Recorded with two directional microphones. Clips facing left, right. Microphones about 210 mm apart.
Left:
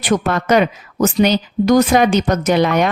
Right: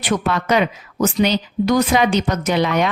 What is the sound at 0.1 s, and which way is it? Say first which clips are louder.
Speech: left 3 dB; 45° left (ahead or behind).